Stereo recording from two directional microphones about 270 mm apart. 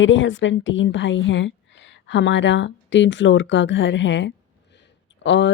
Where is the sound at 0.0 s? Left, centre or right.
Left.